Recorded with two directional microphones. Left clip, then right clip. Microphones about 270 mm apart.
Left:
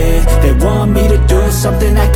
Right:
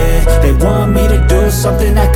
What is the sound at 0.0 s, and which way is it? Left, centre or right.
Music, centre.